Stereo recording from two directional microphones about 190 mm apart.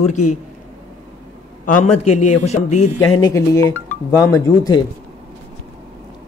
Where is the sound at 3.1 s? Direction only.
20° left (ahead or behind).